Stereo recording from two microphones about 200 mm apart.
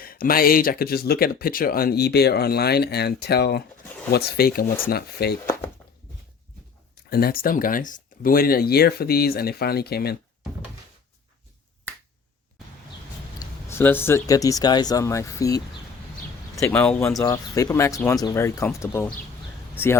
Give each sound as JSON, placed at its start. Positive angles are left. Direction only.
{"t": 0.0, "sound": "speech", "side_deg": 45}
{"t": 7.1, "sound": "speech", "side_deg": 50}
{"t": 13.4, "sound": "speech", "side_deg": 10}
{"t": 17.2, "sound": "speech", "side_deg": 15}